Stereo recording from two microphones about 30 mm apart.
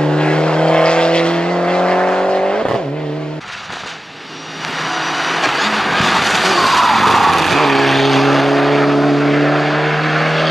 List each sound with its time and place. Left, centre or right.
0.1 s vehicle: left
4.7 s vehicle: centre